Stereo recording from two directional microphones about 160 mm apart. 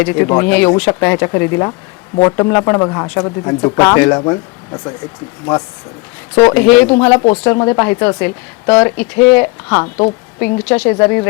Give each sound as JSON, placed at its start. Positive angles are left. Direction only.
{"t": 0.0, "sound": "speech", "side_deg": 10}
{"t": 5.5, "sound": "speech", "side_deg": 5}